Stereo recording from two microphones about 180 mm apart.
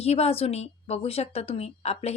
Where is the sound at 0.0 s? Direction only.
35° left (ahead or behind).